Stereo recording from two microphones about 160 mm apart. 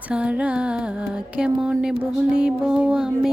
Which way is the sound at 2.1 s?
5° right (ahead or behind).